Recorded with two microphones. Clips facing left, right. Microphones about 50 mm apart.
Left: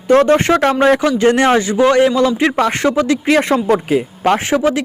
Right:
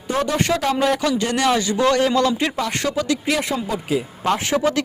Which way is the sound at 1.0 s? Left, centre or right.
Left.